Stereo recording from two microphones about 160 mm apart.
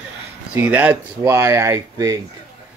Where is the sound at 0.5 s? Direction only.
10° right (ahead or behind).